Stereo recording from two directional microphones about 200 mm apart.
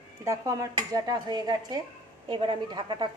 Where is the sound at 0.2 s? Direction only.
15° right (ahead or behind).